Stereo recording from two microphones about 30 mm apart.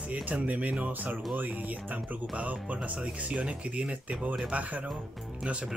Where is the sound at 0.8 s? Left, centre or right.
Right.